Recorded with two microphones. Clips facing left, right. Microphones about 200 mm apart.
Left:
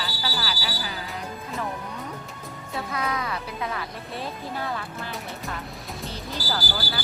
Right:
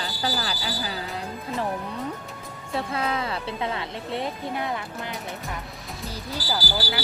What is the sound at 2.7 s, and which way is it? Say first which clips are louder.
Speech: right 2 dB; 30° right (ahead or behind).